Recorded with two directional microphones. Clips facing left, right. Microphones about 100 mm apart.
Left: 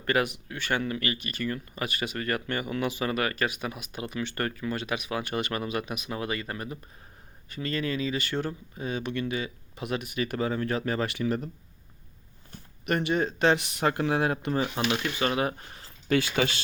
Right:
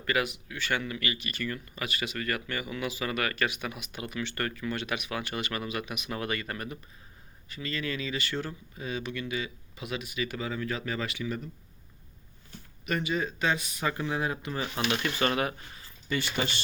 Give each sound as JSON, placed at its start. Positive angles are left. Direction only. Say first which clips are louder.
{"t": 0.0, "sound": "speech", "louder": "left 3 dB", "side_deg": 35}
{"t": 6.1, "sound": "speech", "louder": "left 1 dB", "side_deg": 25}
{"t": 7.5, "sound": "speech", "louder": "left 4 dB", "side_deg": 45}
{"t": 8.4, "sound": "speech", "louder": "left 4 dB", "side_deg": 35}
{"t": 9.7, "sound": "speech", "louder": "left 4 dB", "side_deg": 55}
{"t": 12.5, "sound": "speech", "louder": "left 4 dB", "side_deg": 60}
{"t": 15.0, "sound": "speech", "louder": "even", "side_deg": 5}
{"t": 16.0, "sound": "speech", "louder": "left 6 dB", "side_deg": 90}